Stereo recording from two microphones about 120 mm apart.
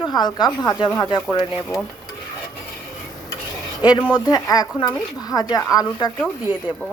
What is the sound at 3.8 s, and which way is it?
A woman's voice, 35° left (ahead or behind).